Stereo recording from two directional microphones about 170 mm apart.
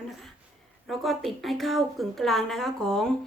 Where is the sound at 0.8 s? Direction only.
Centre (ahead or behind).